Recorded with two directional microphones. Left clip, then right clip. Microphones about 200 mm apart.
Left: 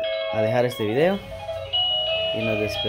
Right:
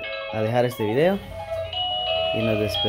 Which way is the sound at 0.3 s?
5° right (ahead or behind).